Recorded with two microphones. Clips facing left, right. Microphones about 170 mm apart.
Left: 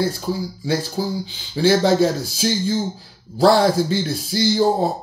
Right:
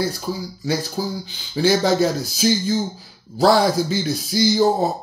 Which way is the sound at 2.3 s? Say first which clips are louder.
Right 1 dB; 5° right (ahead or behind).